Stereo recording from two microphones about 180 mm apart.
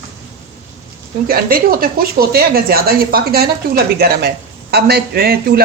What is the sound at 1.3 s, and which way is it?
Speech, 55° right (ahead or behind).